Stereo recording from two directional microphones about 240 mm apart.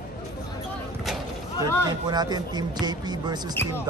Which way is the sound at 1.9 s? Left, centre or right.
Centre.